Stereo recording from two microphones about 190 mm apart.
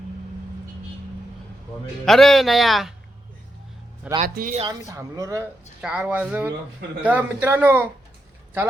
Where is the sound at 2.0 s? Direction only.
Centre (ahead or behind).